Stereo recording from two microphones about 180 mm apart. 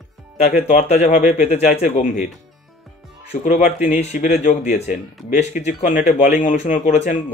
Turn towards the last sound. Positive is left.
turn(degrees=45)  # may be behind; listen again after turning